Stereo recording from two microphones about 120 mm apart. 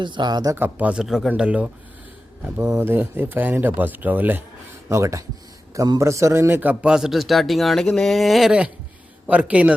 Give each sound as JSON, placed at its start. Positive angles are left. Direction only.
{"t": 0.0, "sound": "speech", "side_deg": -40}
{"t": 0.5, "sound": "speech", "side_deg": -15}
{"t": 1.0, "sound": "a man's voice", "side_deg": 0}
{"t": 2.6, "sound": "a man's voice", "side_deg": -25}